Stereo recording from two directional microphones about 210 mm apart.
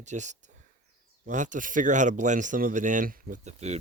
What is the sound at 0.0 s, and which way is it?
Speech, 35° right (ahead or behind).